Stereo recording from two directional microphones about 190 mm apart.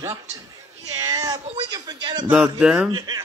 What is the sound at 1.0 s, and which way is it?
Speech, 20° right (ahead or behind).